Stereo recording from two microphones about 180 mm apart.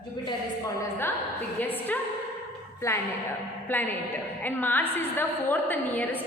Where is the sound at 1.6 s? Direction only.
10° left (ahead or behind).